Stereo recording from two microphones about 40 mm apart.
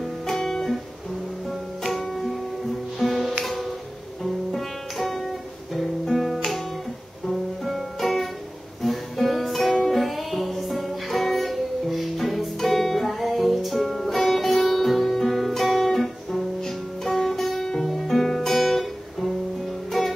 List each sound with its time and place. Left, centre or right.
0.3 s guitar: centre
1.8 s music: centre
4.5 s music: centre
7.6 s music: centre
17.9 s guitar: centre
19.9 s music: centre